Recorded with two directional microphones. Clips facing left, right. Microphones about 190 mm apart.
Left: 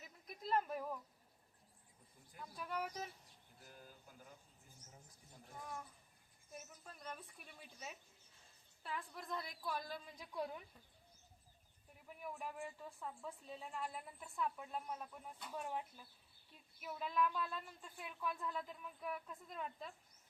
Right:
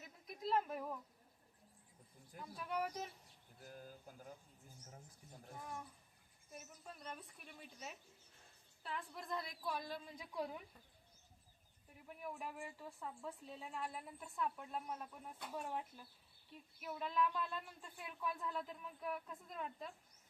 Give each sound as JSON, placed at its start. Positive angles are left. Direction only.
{"t": 0.3, "sound": "a sound", "side_deg": 0}
{"t": 2.6, "sound": "a woman's voice", "side_deg": 0}
{"t": 3.6, "sound": "speech", "side_deg": -45}
{"t": 6.5, "sound": "a woman's voice", "side_deg": 0}
{"t": 11.9, "sound": "a woman's voice", "side_deg": 0}